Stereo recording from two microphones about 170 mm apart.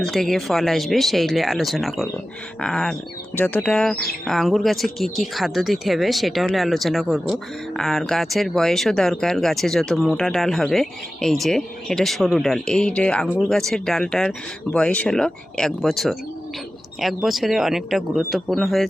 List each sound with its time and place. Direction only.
0.0 s speech: centre (ahead or behind)